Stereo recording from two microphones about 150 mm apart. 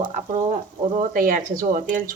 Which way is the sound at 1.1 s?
65° right (ahead or behind).